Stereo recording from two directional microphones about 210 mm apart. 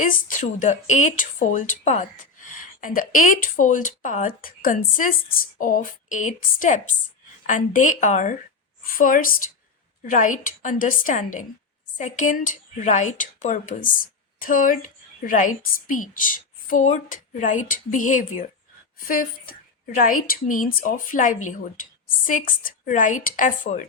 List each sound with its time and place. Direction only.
0.0 s a woman's voice: 40° left (ahead or behind)